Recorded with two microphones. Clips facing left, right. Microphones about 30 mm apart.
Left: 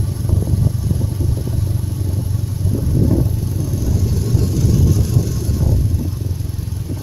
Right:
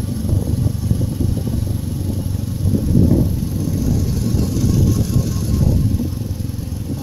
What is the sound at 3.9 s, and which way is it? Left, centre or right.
Vehicle, right.